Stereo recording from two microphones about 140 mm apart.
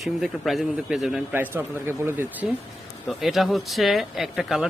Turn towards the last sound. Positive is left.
turn(degrees=-5)  # may be behind; listen again after turning